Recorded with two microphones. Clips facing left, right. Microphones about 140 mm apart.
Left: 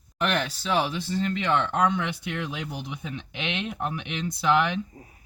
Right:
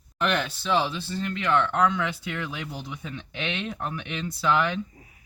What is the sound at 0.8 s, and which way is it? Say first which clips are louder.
Speech: left 3 dB; 20° left (ahead or behind).